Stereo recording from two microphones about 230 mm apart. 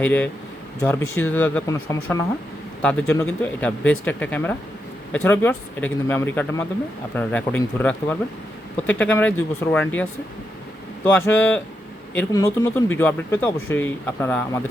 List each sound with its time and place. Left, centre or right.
0.0 s speech: centre